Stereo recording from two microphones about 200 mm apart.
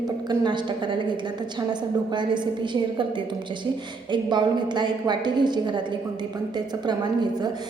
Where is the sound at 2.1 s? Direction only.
25° right (ahead or behind).